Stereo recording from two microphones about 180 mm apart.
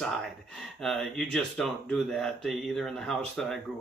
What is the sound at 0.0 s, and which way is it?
Speech, centre (ahead or behind).